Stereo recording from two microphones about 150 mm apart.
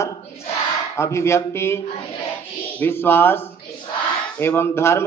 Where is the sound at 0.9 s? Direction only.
20° left (ahead or behind).